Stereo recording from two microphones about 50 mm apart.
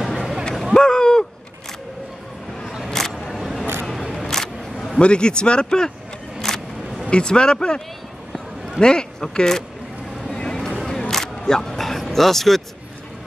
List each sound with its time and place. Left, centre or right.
0.0 s a sound: centre
2.6 s vehicle: centre
2.9 s vehicle: centre
3.3 s single-lens reflex camera: centre
4.9 s speech: centre
6.4 s vehicle: centre
7.1 s speech: centre
10.3 s a sound: centre
10.9 s single-lens reflex camera: centre